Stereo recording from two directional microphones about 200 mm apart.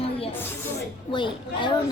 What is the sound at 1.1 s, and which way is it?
Speech, 25° left (ahead or behind).